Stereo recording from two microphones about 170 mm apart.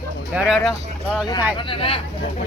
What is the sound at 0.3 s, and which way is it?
Speech, centre (ahead or behind).